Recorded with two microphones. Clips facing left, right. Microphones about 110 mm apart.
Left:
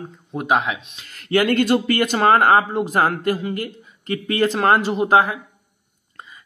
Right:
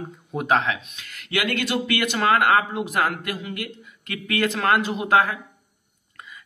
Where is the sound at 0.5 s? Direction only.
10° left (ahead or behind).